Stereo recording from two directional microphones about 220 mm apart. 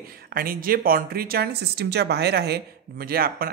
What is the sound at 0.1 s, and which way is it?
Speech, 40° right (ahead or behind).